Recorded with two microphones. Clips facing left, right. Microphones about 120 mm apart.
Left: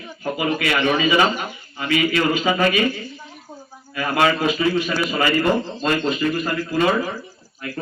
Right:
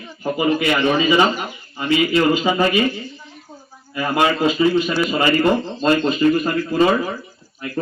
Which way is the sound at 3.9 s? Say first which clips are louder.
Right 1 dB; 25° right (ahead or behind).